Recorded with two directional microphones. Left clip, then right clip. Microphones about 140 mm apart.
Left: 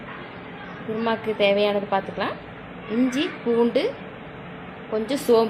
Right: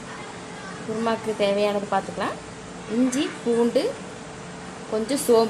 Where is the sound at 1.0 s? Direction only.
5° left (ahead or behind).